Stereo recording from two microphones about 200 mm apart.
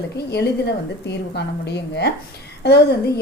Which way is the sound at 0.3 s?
55° left (ahead or behind).